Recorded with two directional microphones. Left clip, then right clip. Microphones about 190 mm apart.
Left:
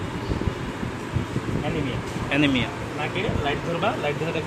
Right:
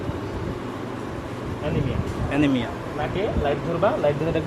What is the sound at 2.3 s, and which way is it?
Speech, 5° right (ahead or behind).